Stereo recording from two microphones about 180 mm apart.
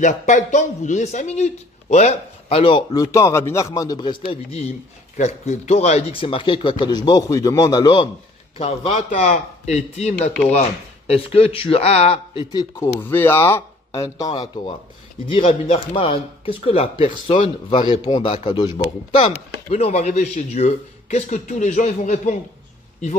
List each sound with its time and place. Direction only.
0.0 s a man's voice: 40° left (ahead or behind); by 8.1 s 25° left (ahead or behind)
8.5 s a man's voice: 35° left (ahead or behind)
12.8 s a man's voice: 10° left (ahead or behind); by 17.5 s 40° left (ahead or behind)
17.6 s a man's voice: 30° left (ahead or behind)